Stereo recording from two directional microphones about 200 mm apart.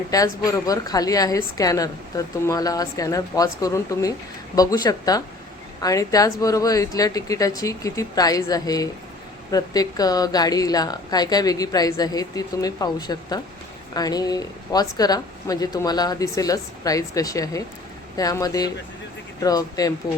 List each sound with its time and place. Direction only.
0.1 s a woman's voice: 15° left (ahead or behind)